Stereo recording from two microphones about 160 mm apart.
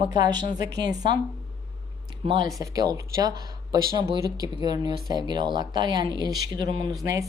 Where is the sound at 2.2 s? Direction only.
30° right (ahead or behind).